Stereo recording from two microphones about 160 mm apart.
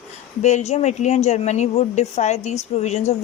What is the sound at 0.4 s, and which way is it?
A woman's voice, 45° left (ahead or behind).